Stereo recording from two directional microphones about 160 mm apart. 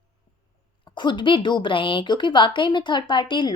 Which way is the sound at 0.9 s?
30° left (ahead or behind).